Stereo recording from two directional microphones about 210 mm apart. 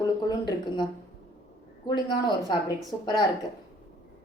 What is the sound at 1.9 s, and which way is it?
A woman's voice, 20° left (ahead or behind).